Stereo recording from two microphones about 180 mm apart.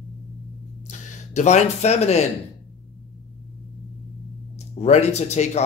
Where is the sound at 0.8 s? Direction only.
40° left (ahead or behind).